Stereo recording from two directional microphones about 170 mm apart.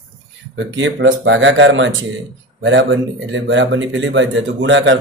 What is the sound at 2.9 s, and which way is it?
Speech, 90° right.